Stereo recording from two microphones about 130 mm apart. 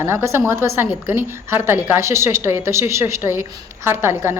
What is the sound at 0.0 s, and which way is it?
A woman's voice, 20° right (ahead or behind).